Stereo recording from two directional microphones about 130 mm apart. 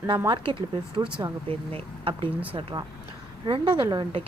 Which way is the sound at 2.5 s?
35° right (ahead or behind).